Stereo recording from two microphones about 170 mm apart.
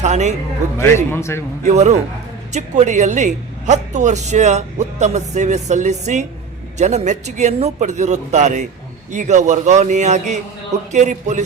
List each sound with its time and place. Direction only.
0.0 s a man's voice: 45° right (ahead or behind)
0.8 s a man's voice: 15° left (ahead or behind)
1.6 s a man's voice: 40° right (ahead or behind)